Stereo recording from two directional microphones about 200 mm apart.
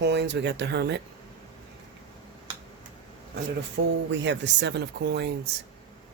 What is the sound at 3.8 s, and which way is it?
Speech, 60° right (ahead or behind).